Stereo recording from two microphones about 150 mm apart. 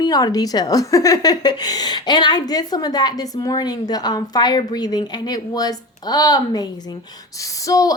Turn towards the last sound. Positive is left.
turn(degrees=25)  # may be behind; listen again after turning